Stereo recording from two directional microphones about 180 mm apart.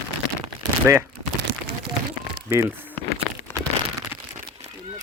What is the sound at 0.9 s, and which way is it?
Speech, 10° right (ahead or behind).